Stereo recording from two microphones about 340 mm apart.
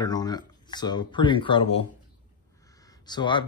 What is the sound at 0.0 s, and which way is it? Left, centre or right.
Speech, centre.